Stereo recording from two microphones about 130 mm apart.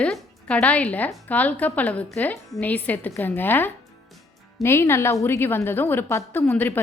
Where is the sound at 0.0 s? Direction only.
5° left (ahead or behind).